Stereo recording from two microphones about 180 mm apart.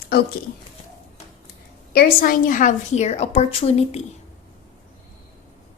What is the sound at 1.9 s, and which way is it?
A woman's voice, 50° left (ahead or behind).